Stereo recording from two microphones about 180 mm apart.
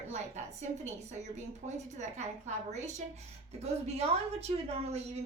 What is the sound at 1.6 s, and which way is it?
Speech, 40° right (ahead or behind).